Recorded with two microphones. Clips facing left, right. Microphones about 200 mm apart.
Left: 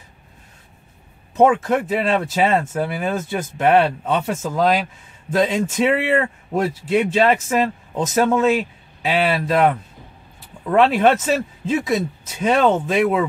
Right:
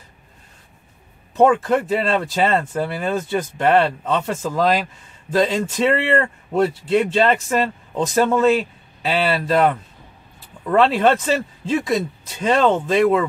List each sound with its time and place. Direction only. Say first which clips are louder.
1.3 s speech: even; 5° left (ahead or behind)